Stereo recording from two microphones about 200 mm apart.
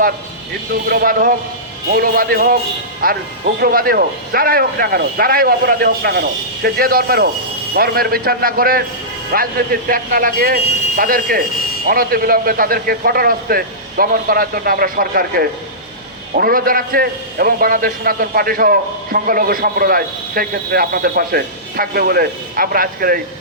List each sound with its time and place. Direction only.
0.9 s a man's voice: 45° right (ahead or behind)